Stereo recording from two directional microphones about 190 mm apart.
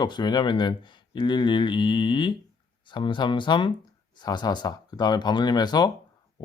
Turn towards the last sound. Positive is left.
turn(degrees=20)  # may be behind; listen again after turning